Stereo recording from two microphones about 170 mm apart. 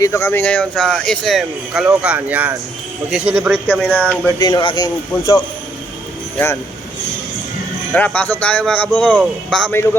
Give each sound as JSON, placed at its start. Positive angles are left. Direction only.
{"t": 0.0, "sound": "speech", "side_deg": 15}
{"t": 4.4, "sound": "speech", "side_deg": 25}
{"t": 7.9, "sound": "speech", "side_deg": 10}